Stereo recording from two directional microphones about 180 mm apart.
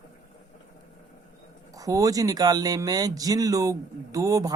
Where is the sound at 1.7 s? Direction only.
20° right (ahead or behind).